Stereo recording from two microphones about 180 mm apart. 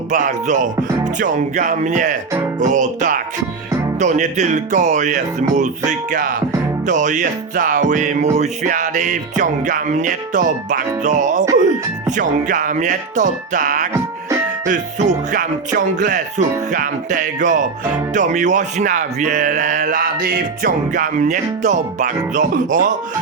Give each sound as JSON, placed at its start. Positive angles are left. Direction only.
{"t": 0.1, "sound": "music", "side_deg": -45}